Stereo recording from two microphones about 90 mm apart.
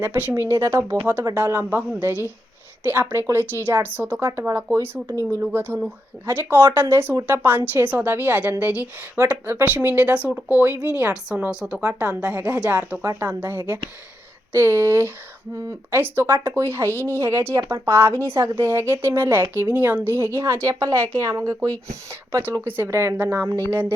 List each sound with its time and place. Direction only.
0.0 s speech: 20° right (ahead or behind)
4.3 s speech: 35° right (ahead or behind); by 13.0 s 15° right (ahead or behind)
13.0 s speech: 30° right (ahead or behind)
13.4 s speech: 20° right (ahead or behind)
23.1 s speech: 20° right (ahead or behind)